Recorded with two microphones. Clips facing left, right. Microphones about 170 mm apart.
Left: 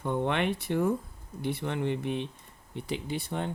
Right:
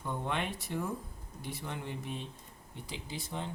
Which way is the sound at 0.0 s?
70° left (ahead or behind).